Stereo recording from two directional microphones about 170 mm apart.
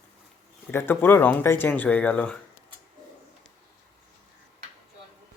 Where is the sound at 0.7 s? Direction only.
15° left (ahead or behind).